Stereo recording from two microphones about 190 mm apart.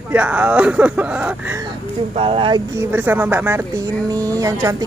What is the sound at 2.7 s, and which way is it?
Speech, 10° right (ahead or behind).